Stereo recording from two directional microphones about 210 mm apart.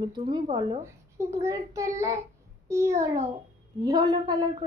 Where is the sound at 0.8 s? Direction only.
15° right (ahead or behind).